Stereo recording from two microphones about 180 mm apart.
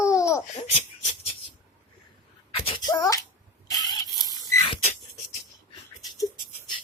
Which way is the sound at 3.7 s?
20° left (ahead or behind).